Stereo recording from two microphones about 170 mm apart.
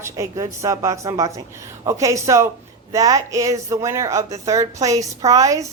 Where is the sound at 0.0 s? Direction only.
20° right (ahead or behind).